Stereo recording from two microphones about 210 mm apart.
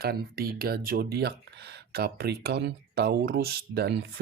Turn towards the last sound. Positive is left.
turn(degrees=-50)  # may be behind; listen again after turning